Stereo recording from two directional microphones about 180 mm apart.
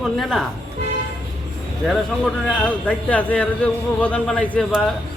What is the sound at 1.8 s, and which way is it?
A man's voice, 5° left (ahead or behind).